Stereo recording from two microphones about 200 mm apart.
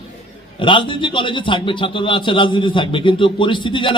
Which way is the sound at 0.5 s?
25° left (ahead or behind).